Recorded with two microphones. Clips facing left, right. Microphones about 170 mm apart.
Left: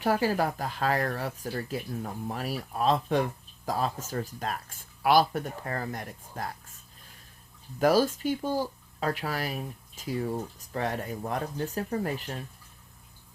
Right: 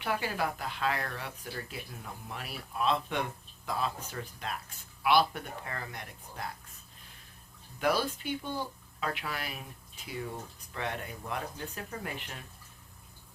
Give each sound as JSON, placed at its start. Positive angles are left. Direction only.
{"t": 0.0, "sound": "speech", "side_deg": 40}
{"t": 7.8, "sound": "speech", "side_deg": 40}